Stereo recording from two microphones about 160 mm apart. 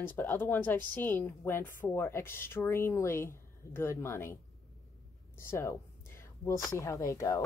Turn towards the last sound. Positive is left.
turn(degrees=20)  # may be behind; listen again after turning